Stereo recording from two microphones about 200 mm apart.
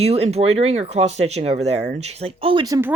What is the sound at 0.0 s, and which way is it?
Speech, 30° right (ahead or behind).